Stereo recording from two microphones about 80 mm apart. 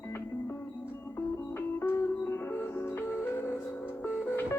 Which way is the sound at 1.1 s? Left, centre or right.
Left.